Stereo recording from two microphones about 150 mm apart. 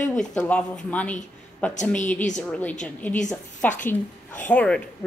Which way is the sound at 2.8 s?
5° left (ahead or behind).